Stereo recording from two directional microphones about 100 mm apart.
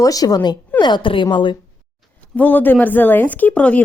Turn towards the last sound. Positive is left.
turn(degrees=15)  # may be behind; listen again after turning